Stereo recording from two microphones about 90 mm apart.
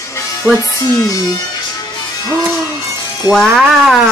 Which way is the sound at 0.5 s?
35° left (ahead or behind).